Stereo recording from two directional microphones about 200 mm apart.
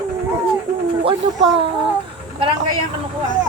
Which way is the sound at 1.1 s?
25° right (ahead or behind).